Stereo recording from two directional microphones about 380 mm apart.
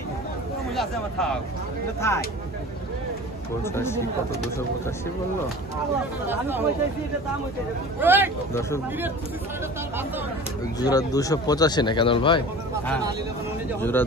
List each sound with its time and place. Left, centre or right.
0.7 s speech: centre
3.6 s speech: centre
6.2 s speech: centre
8.0 s speech: centre
8.5 s speech: centre
10.8 s speech: centre